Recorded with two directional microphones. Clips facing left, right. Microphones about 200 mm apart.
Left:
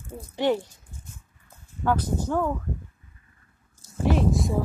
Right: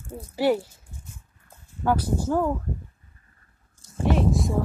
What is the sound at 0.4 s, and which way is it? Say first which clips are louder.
Speech: right 2 dB; 10° right (ahead or behind).